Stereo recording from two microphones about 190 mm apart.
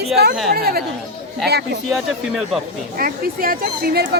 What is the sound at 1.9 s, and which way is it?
Speech, centre (ahead or behind).